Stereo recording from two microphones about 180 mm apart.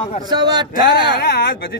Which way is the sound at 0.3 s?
25° right (ahead or behind).